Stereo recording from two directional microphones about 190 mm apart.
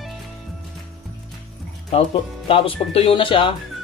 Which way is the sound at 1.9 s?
30° left (ahead or behind).